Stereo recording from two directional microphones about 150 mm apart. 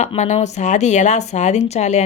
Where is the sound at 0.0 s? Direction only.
50° left (ahead or behind).